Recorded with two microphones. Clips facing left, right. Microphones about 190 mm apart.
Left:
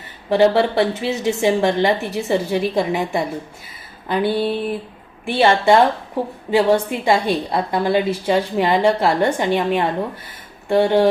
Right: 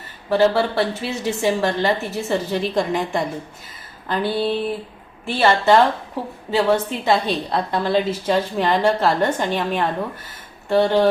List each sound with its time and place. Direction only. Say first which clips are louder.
0.3 s a woman's voice: left 2 dB; 15° left (ahead or behind)